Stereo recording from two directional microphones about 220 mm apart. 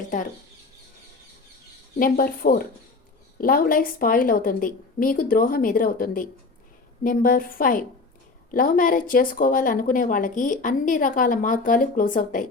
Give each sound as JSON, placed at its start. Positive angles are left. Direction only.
{"t": 2.0, "sound": "a woman's voice", "side_deg": 40}